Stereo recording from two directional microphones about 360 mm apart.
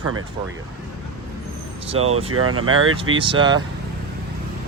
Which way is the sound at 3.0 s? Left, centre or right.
Centre.